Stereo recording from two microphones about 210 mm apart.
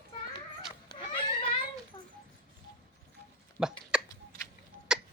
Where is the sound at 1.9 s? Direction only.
25° left (ahead or behind).